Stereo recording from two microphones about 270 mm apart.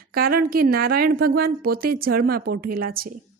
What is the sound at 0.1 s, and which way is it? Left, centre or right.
A woman's voice, right.